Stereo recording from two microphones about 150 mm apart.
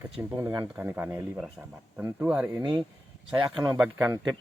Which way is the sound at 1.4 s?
5° right (ahead or behind).